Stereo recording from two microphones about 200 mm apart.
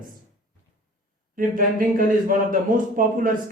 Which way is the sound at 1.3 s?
45° right (ahead or behind).